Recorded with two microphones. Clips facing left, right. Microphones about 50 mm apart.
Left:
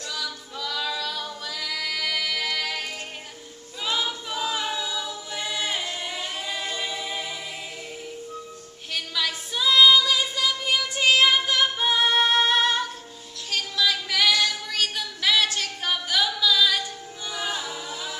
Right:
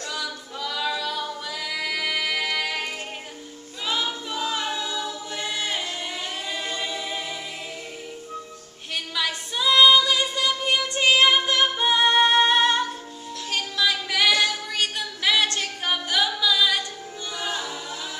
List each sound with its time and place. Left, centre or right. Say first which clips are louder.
0.1 s singing: even; centre
3.8 s choir: even; centre
6.5 s a capella: right 1 dB; centre
8.9 s music: right 1 dB; centre
14.3 s female singing: right 2 dB; right
14.7 s a sound: right 1 dB; centre
17.4 s a capella: even; centre